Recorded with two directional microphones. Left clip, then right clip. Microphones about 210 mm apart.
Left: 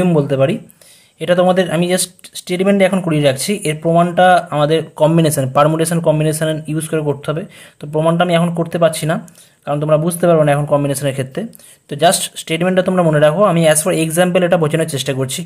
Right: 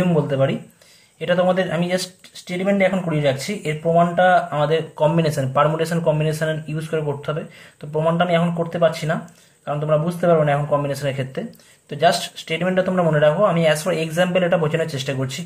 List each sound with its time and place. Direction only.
0.0 s speech: 40° left (ahead or behind)